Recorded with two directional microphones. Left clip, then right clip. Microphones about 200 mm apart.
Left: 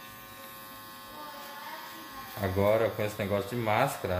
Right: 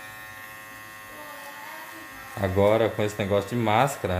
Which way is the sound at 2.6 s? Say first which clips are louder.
Right 5 dB; 55° right (ahead or behind).